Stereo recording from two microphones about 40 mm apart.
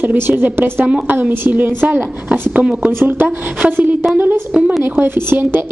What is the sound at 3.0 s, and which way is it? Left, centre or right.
Speech, right.